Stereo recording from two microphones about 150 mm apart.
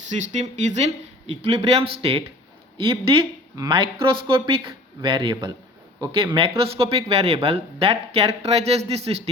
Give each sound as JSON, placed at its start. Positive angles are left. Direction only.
{"t": 0.1, "sound": "speech", "side_deg": -50}
{"t": 3.5, "sound": "speech", "side_deg": -25}
{"t": 4.0, "sound": "speech", "side_deg": -35}